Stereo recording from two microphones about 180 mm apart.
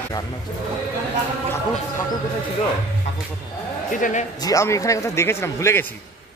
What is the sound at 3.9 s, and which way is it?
Speech, 45° left (ahead or behind).